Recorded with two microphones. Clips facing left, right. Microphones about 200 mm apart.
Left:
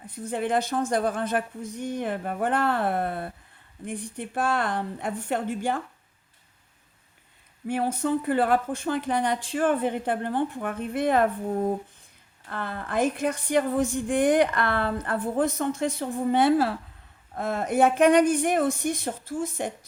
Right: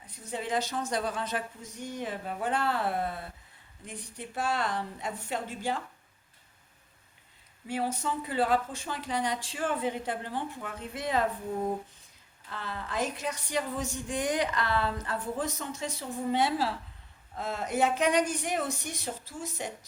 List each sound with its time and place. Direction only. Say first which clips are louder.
0.3 s speech: left 6 dB; 55° left (ahead or behind)
7.7 s speech: left 7 dB; 55° left (ahead or behind)